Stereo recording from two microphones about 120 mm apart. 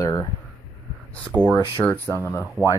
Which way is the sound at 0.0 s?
30° left (ahead or behind).